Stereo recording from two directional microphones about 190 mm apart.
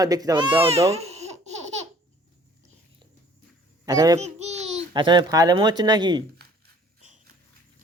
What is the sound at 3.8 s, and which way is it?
Speech, 20° right (ahead or behind).